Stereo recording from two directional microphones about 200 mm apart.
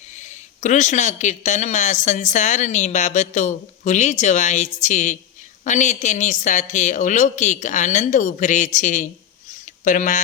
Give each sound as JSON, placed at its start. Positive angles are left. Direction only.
{"t": 0.2, "sound": "a man's voice", "side_deg": 35}